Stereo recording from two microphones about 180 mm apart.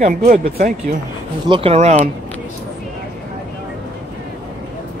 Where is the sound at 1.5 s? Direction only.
35° right (ahead or behind).